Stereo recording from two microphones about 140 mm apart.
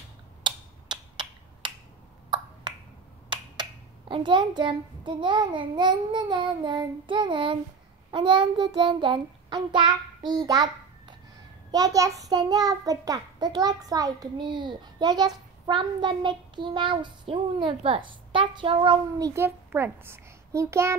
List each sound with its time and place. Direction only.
0.4 s tick-tock: 35° right (ahead or behind)
2.7 s finger snapping: 30° right (ahead or behind)
3.3 s a sound: 35° right (ahead or behind)
4.1 s a child's voice: 35° right (ahead or behind)
8.1 s child singing: 35° right (ahead or behind)
11.7 s a child's voice: 25° right (ahead or behind)